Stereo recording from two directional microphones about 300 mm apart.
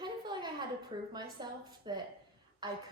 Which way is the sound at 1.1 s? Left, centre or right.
Centre.